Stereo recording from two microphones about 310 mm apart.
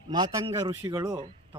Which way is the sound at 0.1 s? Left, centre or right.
Centre.